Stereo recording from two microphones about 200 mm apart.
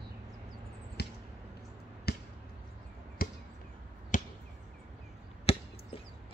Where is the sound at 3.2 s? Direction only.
45° left (ahead or behind).